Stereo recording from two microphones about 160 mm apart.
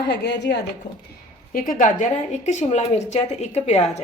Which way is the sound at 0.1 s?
90° left.